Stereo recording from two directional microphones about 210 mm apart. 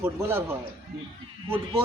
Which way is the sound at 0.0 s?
10° right (ahead or behind).